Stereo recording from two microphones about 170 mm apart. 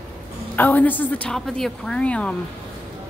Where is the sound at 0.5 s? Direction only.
10° left (ahead or behind).